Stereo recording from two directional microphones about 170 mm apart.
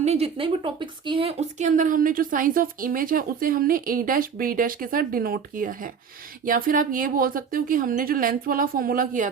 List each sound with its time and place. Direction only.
0.0 s speech: 35° right (ahead or behind)